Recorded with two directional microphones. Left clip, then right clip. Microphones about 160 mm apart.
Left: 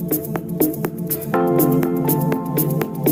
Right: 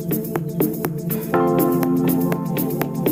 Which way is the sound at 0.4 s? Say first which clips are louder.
Left 1 dB; centre (ahead or behind).